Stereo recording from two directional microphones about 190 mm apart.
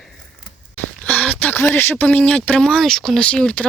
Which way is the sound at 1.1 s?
5° left (ahead or behind).